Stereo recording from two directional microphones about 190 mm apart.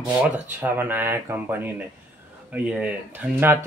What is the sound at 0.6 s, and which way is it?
Speech, 10° right (ahead or behind).